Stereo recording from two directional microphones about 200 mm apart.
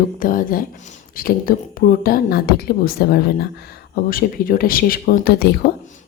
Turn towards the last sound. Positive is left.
turn(degrees=50)  # may be behind; listen again after turning